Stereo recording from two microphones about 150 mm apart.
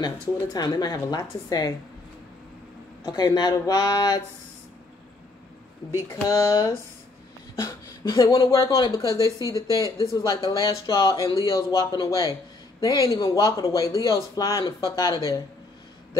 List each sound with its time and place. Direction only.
0.0 s speech: 25° left (ahead or behind)
3.1 s speech: 25° left (ahead or behind)
6.0 s speech: 20° left (ahead or behind)
8.0 s speech: 25° left (ahead or behind)